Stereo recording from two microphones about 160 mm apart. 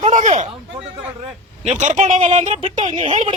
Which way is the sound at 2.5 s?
35° right (ahead or behind).